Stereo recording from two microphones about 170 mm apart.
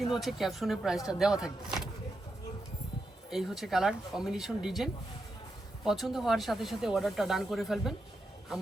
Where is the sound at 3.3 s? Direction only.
Centre (ahead or behind).